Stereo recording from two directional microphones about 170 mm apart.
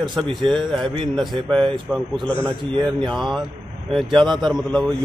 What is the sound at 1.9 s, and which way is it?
Speech, 5° right (ahead or behind).